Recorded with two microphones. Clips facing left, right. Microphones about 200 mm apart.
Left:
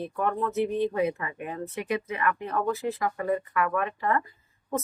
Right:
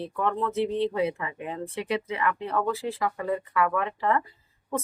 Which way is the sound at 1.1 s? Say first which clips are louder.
Even; 20° right (ahead or behind).